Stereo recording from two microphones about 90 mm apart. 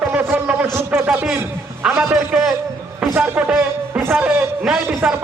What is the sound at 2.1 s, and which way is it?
Speech, 5° right (ahead or behind).